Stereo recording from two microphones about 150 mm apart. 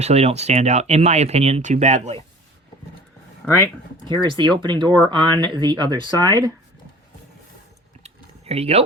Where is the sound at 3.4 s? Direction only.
5° left (ahead or behind).